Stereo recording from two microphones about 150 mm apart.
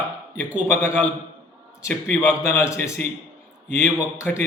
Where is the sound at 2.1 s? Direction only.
15° left (ahead or behind).